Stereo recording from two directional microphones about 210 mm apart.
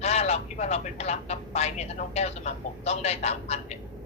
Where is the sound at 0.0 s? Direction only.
30° left (ahead or behind).